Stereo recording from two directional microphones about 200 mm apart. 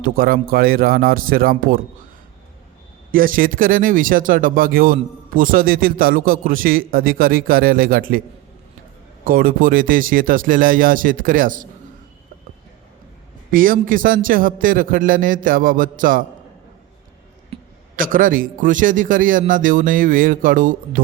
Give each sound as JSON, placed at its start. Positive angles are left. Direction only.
{"t": 0.0, "sound": "a man's voice", "side_deg": -45}
{"t": 3.1, "sound": "a man's voice", "side_deg": -45}
{"t": 9.2, "sound": "a man's voice", "side_deg": -45}
{"t": 13.5, "sound": "a man's voice", "side_deg": -45}
{"t": 17.5, "sound": "a sound", "side_deg": -30}
{"t": 17.9, "sound": "a man's voice", "side_deg": -45}